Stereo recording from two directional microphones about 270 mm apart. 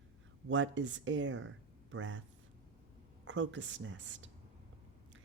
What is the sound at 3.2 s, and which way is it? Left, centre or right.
Speech, right.